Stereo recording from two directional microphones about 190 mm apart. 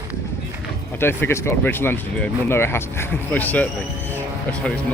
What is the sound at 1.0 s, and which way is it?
Speech, 10° left (ahead or behind).